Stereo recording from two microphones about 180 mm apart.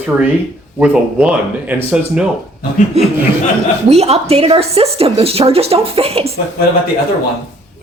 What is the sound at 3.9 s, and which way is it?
Speech, 35° right (ahead or behind).